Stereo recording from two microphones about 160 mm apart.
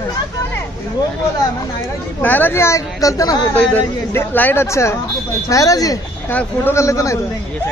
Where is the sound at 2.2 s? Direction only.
10° left (ahead or behind).